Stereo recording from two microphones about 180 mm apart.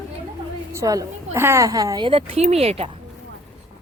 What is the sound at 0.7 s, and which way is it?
A woman's voice, 20° right (ahead or behind).